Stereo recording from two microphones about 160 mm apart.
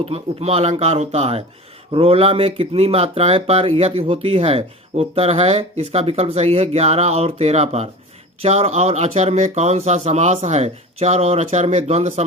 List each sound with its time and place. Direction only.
0.0 s speech: 40° right (ahead or behind)